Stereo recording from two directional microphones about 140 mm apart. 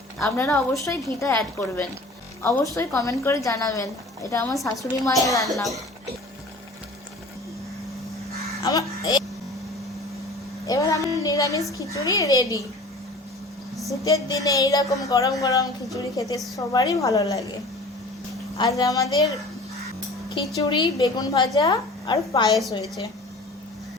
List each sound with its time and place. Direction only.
0.2 s a woman's voice: 15° left (ahead or behind)
8.6 s a child's voice: 25° left (ahead or behind)
10.7 s a woman's voice: 25° left (ahead or behind)
14.0 s a woman's voice: 25° left (ahead or behind)
18.7 s a woman's voice: 25° left (ahead or behind)
20.6 s a woman's voice: 30° left (ahead or behind)